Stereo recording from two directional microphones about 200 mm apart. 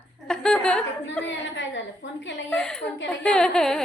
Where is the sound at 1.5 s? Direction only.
65° left (ahead or behind).